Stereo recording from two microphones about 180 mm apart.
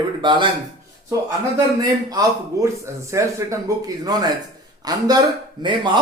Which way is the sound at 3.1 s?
15° right (ahead or behind).